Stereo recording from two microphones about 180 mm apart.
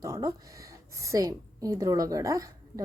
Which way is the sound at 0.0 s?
20° right (ahead or behind).